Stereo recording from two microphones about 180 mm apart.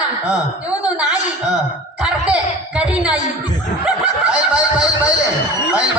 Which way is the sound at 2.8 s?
5° right (ahead or behind).